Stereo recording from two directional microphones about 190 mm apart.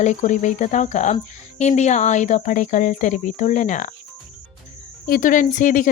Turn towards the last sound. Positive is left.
turn(degrees=45)  # may be behind; listen again after turning